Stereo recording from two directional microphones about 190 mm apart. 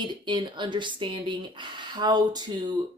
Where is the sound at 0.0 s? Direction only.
25° right (ahead or behind).